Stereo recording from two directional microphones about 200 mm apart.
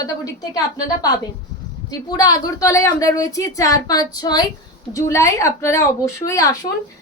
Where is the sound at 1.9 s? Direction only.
20° left (ahead or behind).